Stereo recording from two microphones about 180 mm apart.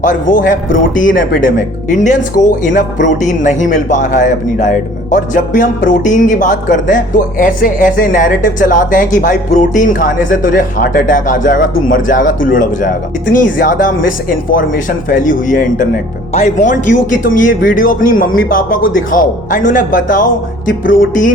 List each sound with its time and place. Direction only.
0.0 s speech: 50° left (ahead or behind)